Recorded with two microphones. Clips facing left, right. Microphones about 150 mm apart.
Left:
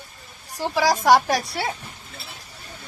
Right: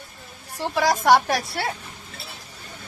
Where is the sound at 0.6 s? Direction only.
Centre (ahead or behind).